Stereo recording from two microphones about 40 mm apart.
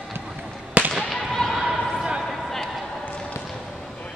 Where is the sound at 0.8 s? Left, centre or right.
Right.